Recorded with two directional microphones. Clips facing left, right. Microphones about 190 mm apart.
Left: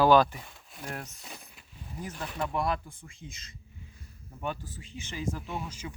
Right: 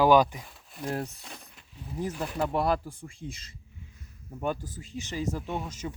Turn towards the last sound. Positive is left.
turn(degrees=-35)  # may be behind; listen again after turning